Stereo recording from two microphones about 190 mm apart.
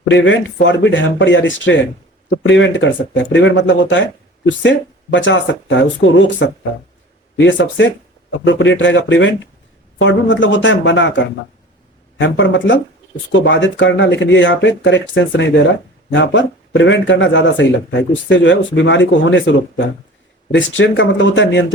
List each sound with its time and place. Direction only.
0.0 s speech: 75° left (ahead or behind)